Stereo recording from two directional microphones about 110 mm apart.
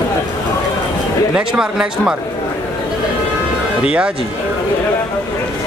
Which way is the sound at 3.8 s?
10° right (ahead or behind).